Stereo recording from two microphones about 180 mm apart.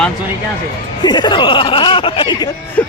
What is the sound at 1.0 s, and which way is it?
Speech, 25° left (ahead or behind).